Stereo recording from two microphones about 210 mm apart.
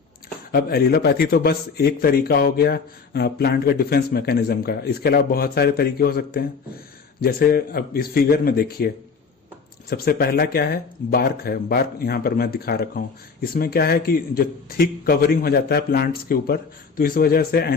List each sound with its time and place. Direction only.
0.5 s a man's voice: 45° left (ahead or behind)
9.9 s a man's voice: 45° left (ahead or behind)